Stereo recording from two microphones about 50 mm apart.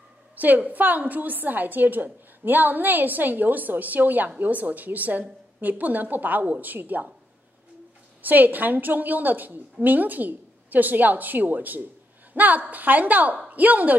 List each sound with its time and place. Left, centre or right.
0.4 s a woman's voice: right
8.2 s a woman's voice: right